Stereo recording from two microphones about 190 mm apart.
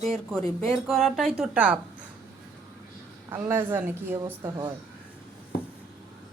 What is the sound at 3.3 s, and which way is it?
A woman's voice, 15° right (ahead or behind).